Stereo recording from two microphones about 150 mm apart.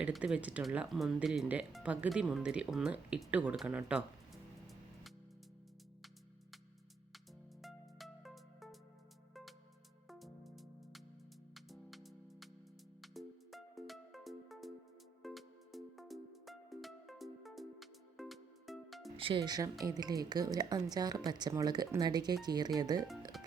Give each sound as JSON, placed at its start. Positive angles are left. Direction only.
{"t": 0.0, "sound": "speech", "side_deg": -5}
{"t": 7.6, "sound": "music", "side_deg": 0}
{"t": 19.1, "sound": "speech", "side_deg": -35}
{"t": 23.3, "sound": "music", "side_deg": 0}